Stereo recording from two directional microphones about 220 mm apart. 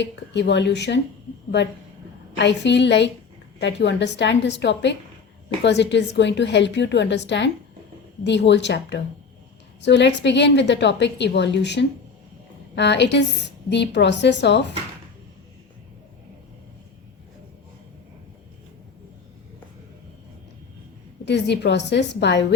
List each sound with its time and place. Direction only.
0.0 s a woman's voice: 50° left (ahead or behind)
2.4 s a woman's voice: 50° left (ahead or behind)
21.2 s a woman's voice: 50° left (ahead or behind)